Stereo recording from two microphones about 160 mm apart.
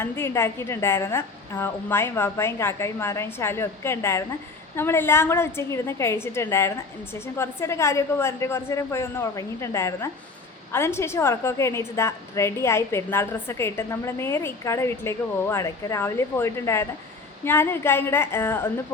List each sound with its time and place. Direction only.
0.0 s a woman's voice: 15° left (ahead or behind)